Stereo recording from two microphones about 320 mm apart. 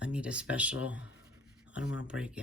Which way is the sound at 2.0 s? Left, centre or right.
Centre.